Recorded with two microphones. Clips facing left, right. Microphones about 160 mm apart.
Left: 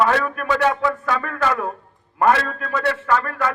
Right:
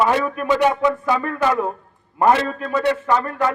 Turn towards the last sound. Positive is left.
turn(degrees=-20)  # may be behind; listen again after turning